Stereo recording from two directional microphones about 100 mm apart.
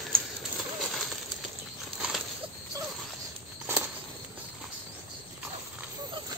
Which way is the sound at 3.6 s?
25° right (ahead or behind).